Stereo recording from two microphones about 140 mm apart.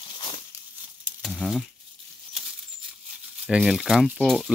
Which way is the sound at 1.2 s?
Centre (ahead or behind).